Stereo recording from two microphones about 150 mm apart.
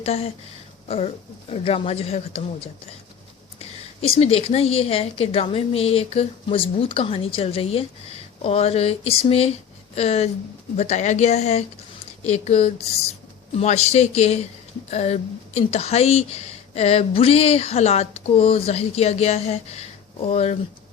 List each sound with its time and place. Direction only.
0.0 s speech: 40° left (ahead or behind)
4.1 s a woman's voice: 40° left (ahead or behind)